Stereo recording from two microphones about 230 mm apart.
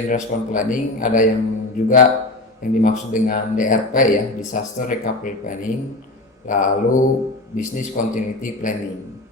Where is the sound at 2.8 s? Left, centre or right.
Left.